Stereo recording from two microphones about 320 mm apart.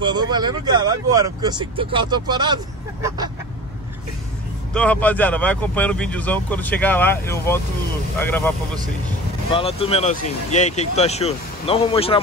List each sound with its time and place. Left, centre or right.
0.0 s speech: centre
4.7 s speech: centre
9.5 s speech: centre